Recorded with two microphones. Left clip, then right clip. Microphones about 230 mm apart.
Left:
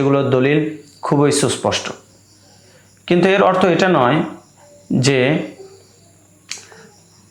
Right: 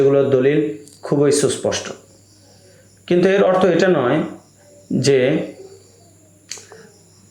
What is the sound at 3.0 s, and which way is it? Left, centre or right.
Speech, left.